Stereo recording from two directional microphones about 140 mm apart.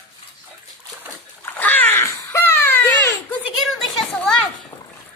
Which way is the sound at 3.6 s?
Centre (ahead or behind).